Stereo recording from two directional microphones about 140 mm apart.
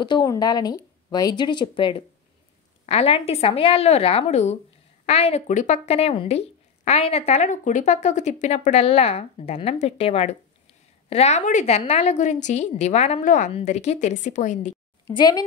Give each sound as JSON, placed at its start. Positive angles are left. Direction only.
{"t": 0.0, "sound": "speech", "side_deg": 35}
{"t": 2.9, "sound": "speech", "side_deg": 45}
{"t": 13.5, "sound": "a woman's voice", "side_deg": 50}
{"t": 15.1, "sound": "a woman's voice", "side_deg": 30}